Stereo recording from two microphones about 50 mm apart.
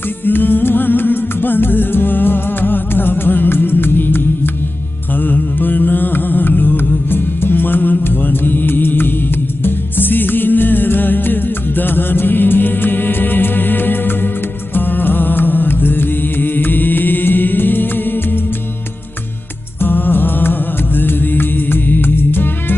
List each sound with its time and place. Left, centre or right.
0.2 s music: left
5.2 s mantra: left
7.1 s music: left
19.8 s music: left